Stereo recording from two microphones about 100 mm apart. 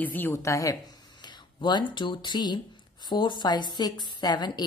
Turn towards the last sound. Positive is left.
turn(degrees=45)  # may be behind; listen again after turning